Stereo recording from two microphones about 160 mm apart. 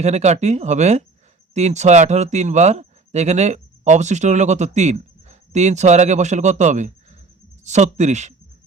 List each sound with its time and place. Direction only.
0.0 s speech: 45° right (ahead or behind)